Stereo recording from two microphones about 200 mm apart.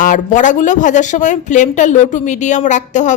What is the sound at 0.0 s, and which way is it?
Speech, 40° left (ahead or behind).